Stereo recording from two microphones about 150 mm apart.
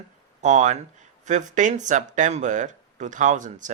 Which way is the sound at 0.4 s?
55° right (ahead or behind).